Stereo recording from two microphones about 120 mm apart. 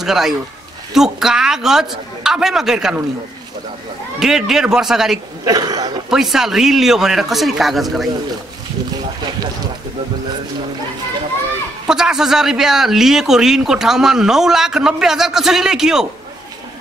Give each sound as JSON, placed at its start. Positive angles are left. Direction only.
{"t": 0.0, "sound": "speech", "side_deg": -5}
{"t": 4.2, "sound": "speech", "side_deg": -5}
{"t": 5.4, "sound": "speech", "side_deg": -30}
{"t": 6.0, "sound": "speech", "side_deg": -5}
{"t": 11.9, "sound": "speech", "side_deg": -5}